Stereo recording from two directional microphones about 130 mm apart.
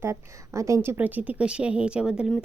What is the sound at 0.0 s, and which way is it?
A woman's voice, 20° right (ahead or behind).